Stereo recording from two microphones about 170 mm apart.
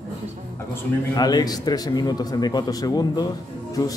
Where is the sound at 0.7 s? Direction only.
25° left (ahead or behind).